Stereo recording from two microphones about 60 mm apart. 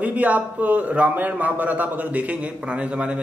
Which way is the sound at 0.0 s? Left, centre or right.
Right.